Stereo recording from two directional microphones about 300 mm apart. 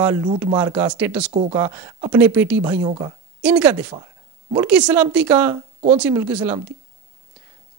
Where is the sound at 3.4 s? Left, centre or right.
Centre.